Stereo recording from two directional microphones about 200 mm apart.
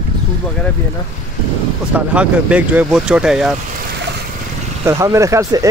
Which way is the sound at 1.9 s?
5° right (ahead or behind).